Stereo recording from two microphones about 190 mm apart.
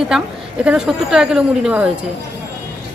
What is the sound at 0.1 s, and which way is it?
Speech, centre (ahead or behind).